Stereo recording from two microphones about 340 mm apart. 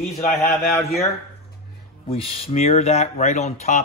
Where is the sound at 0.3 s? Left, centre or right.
Centre.